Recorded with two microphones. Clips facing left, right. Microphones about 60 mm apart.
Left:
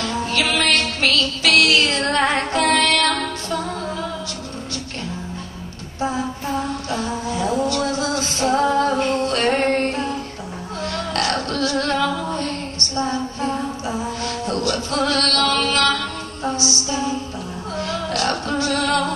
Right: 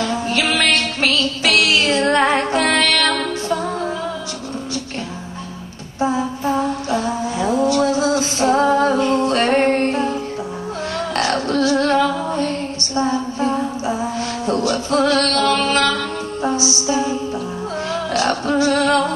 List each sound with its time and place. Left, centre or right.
0.0 s music: centre
5.9 s music: centre
10.9 s a sound: right
16.4 s music: centre